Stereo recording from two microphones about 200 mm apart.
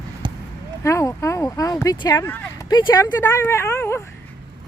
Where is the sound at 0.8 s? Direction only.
15° left (ahead or behind).